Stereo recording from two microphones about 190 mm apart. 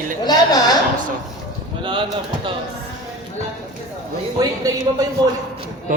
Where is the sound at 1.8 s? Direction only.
25° right (ahead or behind).